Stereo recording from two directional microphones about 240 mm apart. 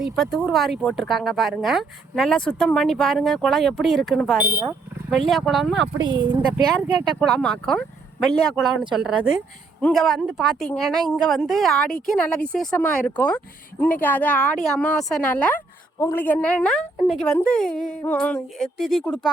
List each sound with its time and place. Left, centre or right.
0.0 s speech: centre
6.0 s speech: centre
7.2 s speech: centre
9.0 s speech: centre